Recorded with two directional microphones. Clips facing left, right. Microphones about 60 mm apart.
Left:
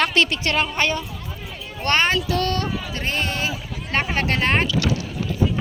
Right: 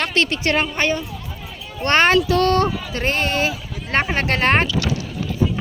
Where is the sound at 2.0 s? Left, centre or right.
Right.